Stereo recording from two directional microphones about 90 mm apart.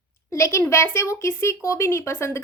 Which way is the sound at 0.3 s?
35° left (ahead or behind).